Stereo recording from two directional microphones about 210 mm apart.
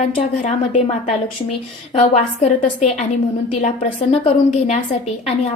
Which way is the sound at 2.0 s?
30° left (ahead or behind).